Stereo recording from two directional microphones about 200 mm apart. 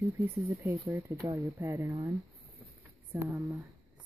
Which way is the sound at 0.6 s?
15° right (ahead or behind).